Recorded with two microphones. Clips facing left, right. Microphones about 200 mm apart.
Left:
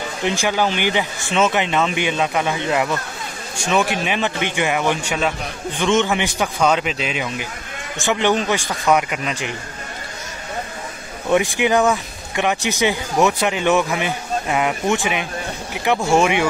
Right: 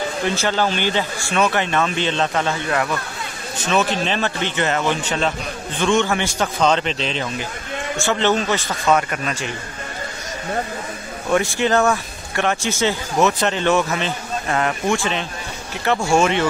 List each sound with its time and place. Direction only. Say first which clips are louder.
0.2 s speech: left 2 dB; 15° left (ahead or behind)
11.2 s speech: left 1 dB; 15° left (ahead or behind)
15.7 s a sound: left 1 dB; 15° left (ahead or behind)
16.1 s speech: left 1 dB; 15° left (ahead or behind)